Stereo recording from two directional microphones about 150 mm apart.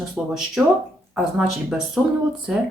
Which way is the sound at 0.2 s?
10° right (ahead or behind).